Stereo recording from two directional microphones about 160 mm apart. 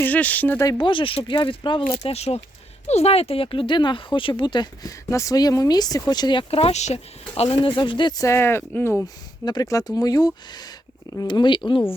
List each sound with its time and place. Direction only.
0.0 s speech: 10° left (ahead or behind)
0.6 s speech: 25° left (ahead or behind)
2.0 s speech: 40° left (ahead or behind)